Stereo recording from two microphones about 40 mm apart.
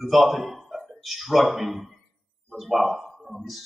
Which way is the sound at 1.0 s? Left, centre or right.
Centre.